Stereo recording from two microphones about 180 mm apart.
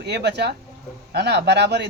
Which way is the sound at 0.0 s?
70° right (ahead or behind).